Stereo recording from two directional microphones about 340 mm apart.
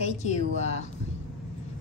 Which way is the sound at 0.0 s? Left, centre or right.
Centre.